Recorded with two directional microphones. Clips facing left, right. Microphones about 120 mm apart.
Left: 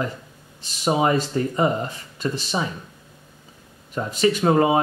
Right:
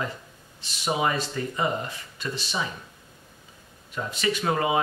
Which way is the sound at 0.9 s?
35° left (ahead or behind).